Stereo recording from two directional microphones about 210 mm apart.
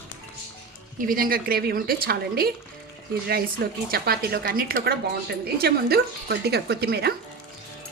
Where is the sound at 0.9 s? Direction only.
40° right (ahead or behind).